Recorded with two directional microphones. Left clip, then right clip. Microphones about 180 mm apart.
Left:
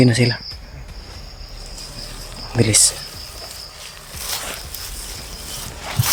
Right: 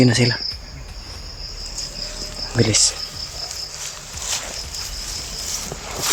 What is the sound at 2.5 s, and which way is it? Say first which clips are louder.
Speech: left 1 dB; 15° left (ahead or behind).